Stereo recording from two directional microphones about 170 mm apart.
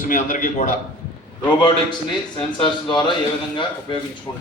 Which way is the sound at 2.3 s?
30° left (ahead or behind).